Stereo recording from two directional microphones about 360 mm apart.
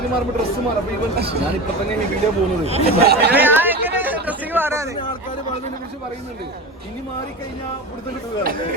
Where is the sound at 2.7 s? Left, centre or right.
Right.